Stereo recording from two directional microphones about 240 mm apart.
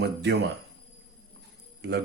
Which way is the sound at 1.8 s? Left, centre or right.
Right.